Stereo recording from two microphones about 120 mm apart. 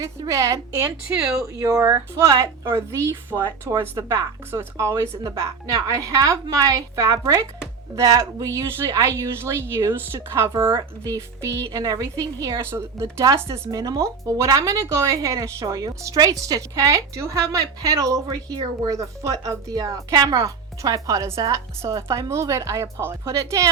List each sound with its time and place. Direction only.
0.0 s a woman's voice: 25° right (ahead or behind)